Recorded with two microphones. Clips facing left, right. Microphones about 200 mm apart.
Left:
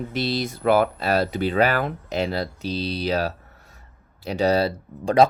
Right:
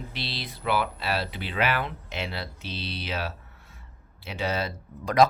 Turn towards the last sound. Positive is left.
turn(degrees=30)  # may be behind; listen again after turning